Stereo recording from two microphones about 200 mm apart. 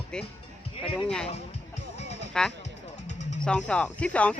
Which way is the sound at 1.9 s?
35° left (ahead or behind).